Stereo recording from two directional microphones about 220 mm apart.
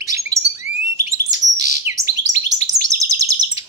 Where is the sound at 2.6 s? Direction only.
15° right (ahead or behind).